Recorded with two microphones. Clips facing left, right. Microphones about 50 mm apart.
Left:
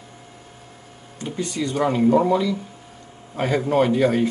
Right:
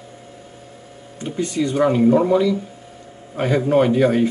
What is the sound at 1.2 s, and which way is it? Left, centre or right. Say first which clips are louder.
Speech: right 4 dB; centre.